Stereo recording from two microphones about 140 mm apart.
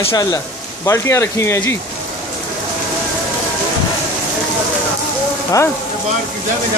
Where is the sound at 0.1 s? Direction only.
25° left (ahead or behind).